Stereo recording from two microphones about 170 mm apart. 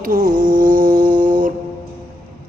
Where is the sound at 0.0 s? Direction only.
55° right (ahead or behind).